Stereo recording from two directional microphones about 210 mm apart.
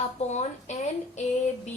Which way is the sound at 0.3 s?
35° left (ahead or behind).